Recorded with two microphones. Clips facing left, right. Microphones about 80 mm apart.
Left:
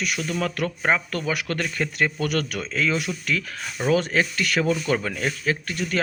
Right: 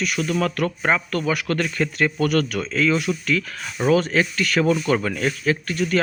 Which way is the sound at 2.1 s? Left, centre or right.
Right.